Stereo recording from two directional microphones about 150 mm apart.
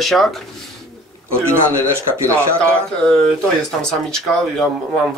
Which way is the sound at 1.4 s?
15° right (ahead or behind).